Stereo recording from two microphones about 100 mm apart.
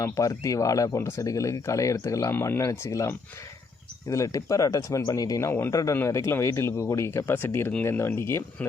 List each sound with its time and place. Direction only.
0.0 s speech: 35° left (ahead or behind)